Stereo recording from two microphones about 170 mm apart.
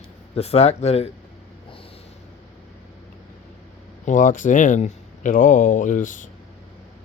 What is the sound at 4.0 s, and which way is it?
Speech, 50° left (ahead or behind).